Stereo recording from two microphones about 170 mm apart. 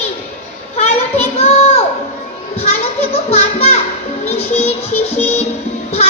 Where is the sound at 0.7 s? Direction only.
40° left (ahead or behind).